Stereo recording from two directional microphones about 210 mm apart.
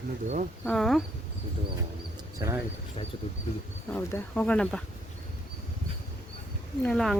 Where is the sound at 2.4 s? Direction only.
15° right (ahead or behind).